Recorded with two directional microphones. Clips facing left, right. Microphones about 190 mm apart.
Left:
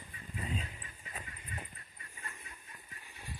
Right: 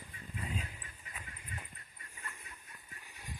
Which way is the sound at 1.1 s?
35° left (ahead or behind).